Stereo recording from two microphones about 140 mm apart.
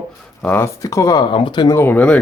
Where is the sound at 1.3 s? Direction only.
35° left (ahead or behind).